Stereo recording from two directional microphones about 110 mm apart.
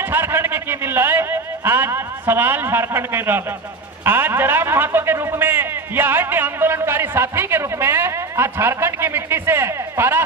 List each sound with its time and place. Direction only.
0.0 s a man's voice: 20° right (ahead or behind)